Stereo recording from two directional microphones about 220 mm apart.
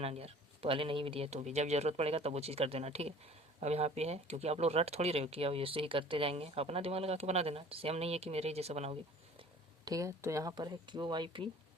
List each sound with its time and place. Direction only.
0.0 s speech: 25° right (ahead or behind)
9.8 s speech: 15° right (ahead or behind)